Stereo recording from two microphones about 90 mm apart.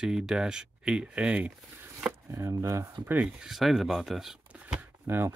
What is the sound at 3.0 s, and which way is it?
Speech, 15° right (ahead or behind).